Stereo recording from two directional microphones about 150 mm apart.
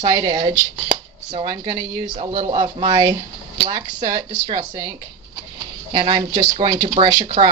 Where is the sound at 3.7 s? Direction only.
55° right (ahead or behind).